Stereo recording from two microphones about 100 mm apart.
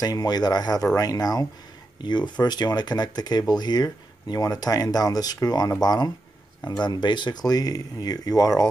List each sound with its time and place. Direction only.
0.0 s speech: 40° left (ahead or behind)
2.0 s speech: 45° left (ahead or behind)